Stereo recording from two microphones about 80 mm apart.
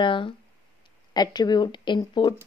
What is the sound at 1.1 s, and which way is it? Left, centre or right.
Speech, left.